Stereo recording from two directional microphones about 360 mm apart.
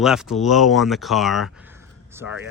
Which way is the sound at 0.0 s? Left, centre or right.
Centre.